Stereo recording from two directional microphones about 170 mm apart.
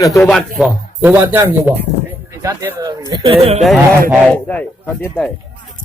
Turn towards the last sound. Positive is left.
turn(degrees=5)  # may be behind; listen again after turning